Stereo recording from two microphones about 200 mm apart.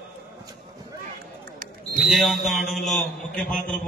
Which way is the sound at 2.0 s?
Centre (ahead or behind).